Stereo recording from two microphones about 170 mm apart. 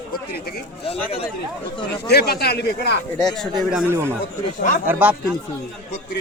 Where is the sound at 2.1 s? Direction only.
70° left (ahead or behind).